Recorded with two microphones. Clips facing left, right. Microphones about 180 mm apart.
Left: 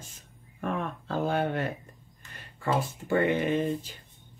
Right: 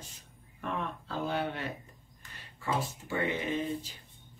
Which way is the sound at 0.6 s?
45° left (ahead or behind).